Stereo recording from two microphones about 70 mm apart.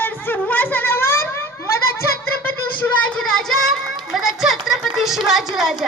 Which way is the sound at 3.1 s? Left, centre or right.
Centre.